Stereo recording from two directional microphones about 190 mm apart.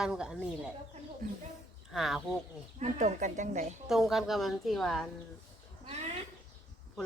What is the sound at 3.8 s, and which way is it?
Speech, centre (ahead or behind).